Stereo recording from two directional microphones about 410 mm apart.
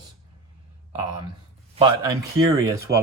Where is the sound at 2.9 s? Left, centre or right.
Right.